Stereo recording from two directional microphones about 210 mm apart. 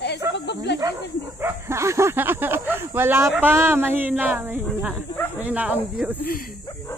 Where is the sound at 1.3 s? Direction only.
10° right (ahead or behind).